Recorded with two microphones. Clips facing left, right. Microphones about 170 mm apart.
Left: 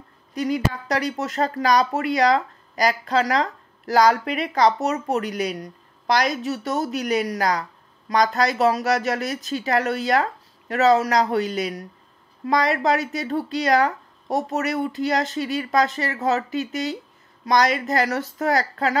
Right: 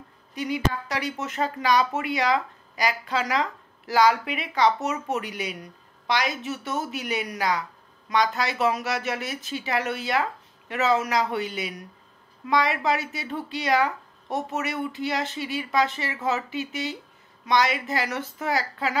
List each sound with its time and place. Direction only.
0.3 s a woman's voice: 40° left (ahead or behind)